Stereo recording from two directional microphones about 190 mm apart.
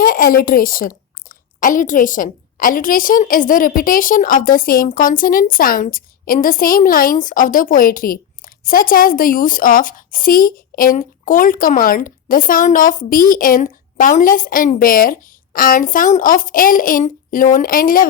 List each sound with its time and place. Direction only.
0.0 s a woman's voice: 50° left (ahead or behind)